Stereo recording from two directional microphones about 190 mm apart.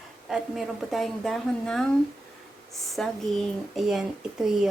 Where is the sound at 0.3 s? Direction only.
Centre (ahead or behind).